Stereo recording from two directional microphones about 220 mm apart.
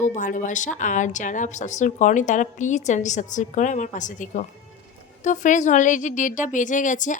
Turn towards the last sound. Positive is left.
turn(degrees=35)  # may be behind; listen again after turning